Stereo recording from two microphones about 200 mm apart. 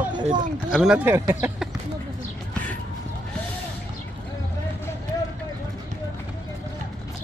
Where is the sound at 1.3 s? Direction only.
10° right (ahead or behind).